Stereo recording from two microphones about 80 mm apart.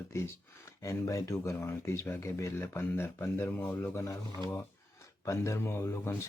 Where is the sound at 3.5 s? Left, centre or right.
Left.